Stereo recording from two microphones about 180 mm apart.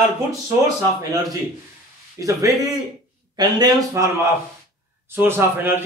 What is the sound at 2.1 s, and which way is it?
Speech, 20° right (ahead or behind).